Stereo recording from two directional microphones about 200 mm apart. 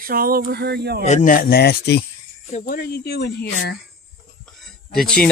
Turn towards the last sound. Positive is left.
turn(degrees=0)  # may be behind; listen again after turning